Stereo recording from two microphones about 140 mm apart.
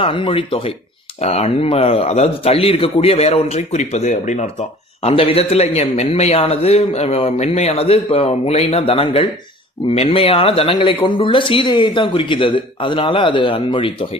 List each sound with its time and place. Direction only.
0.0 s a man's voice: 40° left (ahead or behind); by 4.4 s 55° left (ahead or behind)
5.0 s a man's voice: 45° left (ahead or behind)